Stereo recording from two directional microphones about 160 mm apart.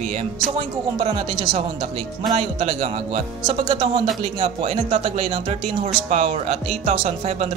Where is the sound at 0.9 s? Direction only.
35° right (ahead or behind).